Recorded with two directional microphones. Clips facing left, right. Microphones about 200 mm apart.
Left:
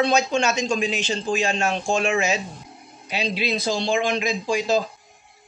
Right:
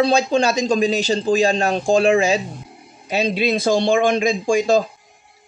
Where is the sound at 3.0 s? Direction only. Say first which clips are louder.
Right 6 dB; 45° right (ahead or behind).